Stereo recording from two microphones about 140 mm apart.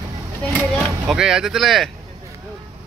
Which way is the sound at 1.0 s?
5° right (ahead or behind).